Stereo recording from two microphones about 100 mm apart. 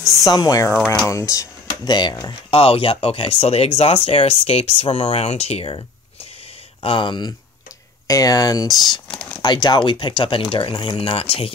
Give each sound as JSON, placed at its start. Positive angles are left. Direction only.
{"t": 0.2, "sound": "speech", "side_deg": 40}
{"t": 1.9, "sound": "speech", "side_deg": 50}
{"t": 2.5, "sound": "speech", "side_deg": 70}
{"t": 6.8, "sound": "speech", "side_deg": 60}
{"t": 8.1, "sound": "speech", "side_deg": 35}
{"t": 9.0, "sound": "speech", "side_deg": 5}
{"t": 9.4, "sound": "speech", "side_deg": 45}